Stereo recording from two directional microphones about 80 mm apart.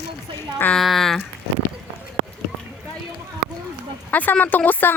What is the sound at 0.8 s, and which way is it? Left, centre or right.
Speech, centre.